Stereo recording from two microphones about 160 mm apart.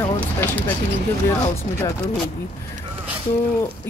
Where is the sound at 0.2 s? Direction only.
10° left (ahead or behind).